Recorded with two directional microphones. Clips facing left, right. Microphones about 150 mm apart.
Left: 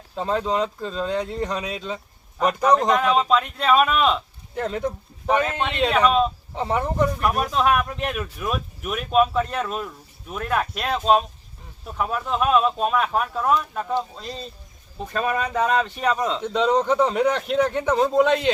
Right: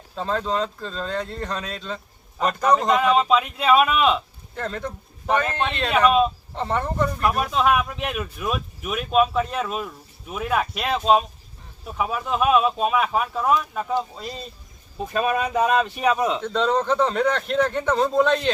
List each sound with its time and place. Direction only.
0.2 s a man's voice: 15° left (ahead or behind)
2.6 s speech: centre (ahead or behind)
4.5 s a man's voice: 15° left (ahead or behind)
5.9 s speech: 5° right (ahead or behind)
6.5 s speech: 10° left (ahead or behind); by 16.4 s 10° right (ahead or behind)
16.4 s a man's voice: 10° left (ahead or behind)